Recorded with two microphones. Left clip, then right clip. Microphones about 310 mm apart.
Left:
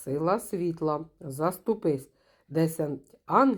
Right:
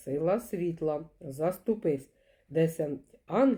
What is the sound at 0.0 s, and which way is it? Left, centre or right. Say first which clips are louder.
Speech: left 2 dB; centre.